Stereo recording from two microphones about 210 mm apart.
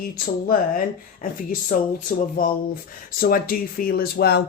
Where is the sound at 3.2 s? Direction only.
45° left (ahead or behind).